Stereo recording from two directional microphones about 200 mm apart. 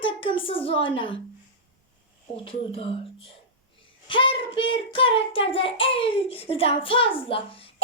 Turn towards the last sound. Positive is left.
turn(degrees=25)  # may be behind; listen again after turning